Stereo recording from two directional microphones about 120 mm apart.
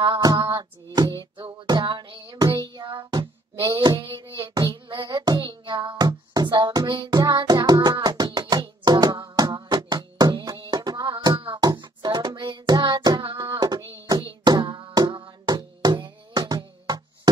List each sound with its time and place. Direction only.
0.0 s music: 40° right (ahead or behind)
3.8 s a sound: 45° right (ahead or behind)
8.3 s hands: 40° right (ahead or behind)